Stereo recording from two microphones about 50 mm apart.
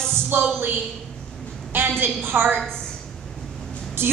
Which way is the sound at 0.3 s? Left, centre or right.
Right.